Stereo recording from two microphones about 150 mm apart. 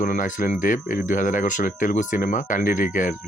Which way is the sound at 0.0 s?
60° left (ahead or behind).